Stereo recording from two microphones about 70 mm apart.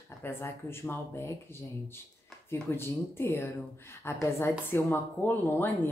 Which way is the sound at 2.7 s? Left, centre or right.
Left.